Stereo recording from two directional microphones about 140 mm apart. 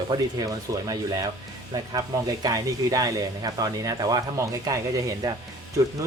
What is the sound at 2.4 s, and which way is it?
Speech, 25° right (ahead or behind).